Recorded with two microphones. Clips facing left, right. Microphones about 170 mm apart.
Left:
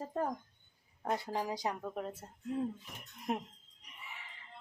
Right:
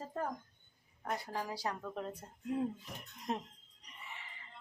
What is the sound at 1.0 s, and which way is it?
A woman's voice, 25° left (ahead or behind).